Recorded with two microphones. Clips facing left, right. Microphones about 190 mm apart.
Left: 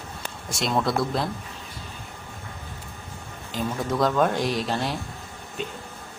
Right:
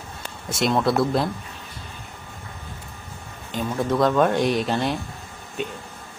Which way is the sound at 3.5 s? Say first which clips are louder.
Right 3 dB; centre (ahead or behind).